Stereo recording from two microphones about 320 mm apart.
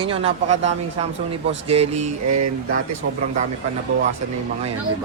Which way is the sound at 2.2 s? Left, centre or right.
Right.